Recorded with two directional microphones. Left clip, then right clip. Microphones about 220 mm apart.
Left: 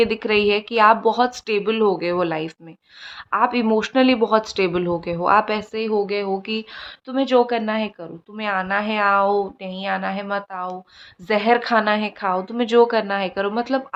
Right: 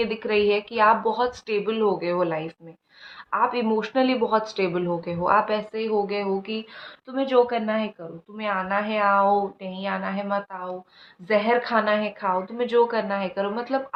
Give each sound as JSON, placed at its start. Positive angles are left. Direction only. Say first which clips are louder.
{"t": 0.0, "sound": "speech", "louder": "left 4 dB", "side_deg": 55}